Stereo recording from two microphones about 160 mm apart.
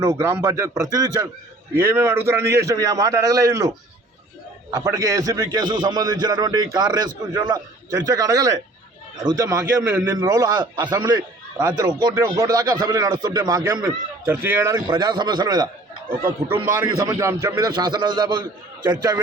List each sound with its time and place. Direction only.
0.0 s a man's voice: 20° right (ahead or behind)